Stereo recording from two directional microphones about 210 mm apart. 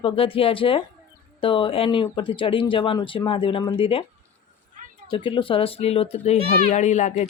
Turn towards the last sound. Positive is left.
turn(degrees=35)  # may be behind; listen again after turning